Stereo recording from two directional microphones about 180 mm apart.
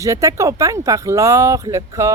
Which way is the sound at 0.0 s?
15° right (ahead or behind).